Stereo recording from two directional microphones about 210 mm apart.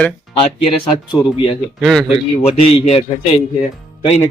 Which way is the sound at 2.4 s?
30° left (ahead or behind).